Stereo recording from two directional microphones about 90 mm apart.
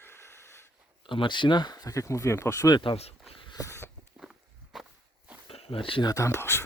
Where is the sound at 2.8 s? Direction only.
90° left.